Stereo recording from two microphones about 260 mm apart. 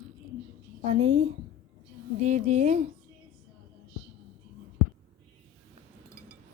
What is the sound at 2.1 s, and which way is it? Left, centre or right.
Music, right.